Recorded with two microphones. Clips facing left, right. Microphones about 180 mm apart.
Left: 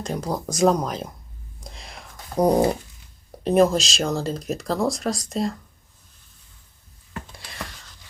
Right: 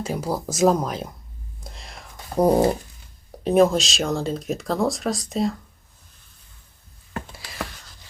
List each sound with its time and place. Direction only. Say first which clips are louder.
0.0 s speech: right 1 dB; 5° right (ahead or behind)
1.6 s a sound: left 1 dB; centre (ahead or behind)
3.4 s speech: right 1 dB; centre (ahead or behind)
7.3 s whispering: right 1 dB; centre (ahead or behind)